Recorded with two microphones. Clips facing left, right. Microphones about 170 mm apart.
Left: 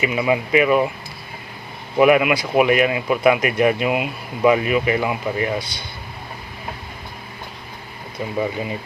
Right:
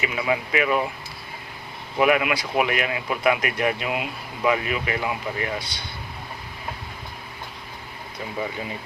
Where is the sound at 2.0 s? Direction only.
15° left (ahead or behind).